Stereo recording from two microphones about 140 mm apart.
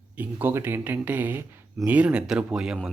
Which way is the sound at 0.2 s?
15° right (ahead or behind).